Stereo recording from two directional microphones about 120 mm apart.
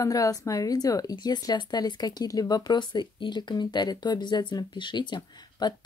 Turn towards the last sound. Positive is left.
turn(degrees=40)  # may be behind; listen again after turning